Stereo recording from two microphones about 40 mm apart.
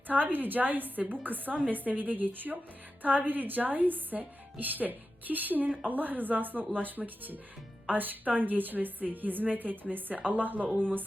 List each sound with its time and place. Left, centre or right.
0.1 s a woman's voice: right